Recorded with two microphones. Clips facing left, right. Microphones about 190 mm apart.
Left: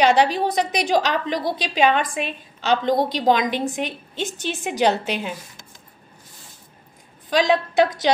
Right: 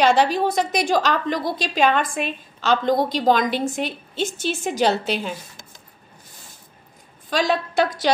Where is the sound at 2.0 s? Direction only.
50° right (ahead or behind).